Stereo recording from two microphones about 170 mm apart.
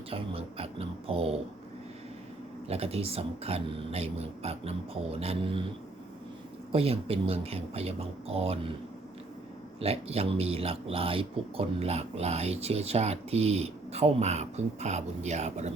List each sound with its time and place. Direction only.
0.1 s speech: 35° right (ahead or behind)
2.6 s speech: 35° right (ahead or behind)
6.7 s speech: 35° right (ahead or behind)
9.8 s speech: 35° right (ahead or behind)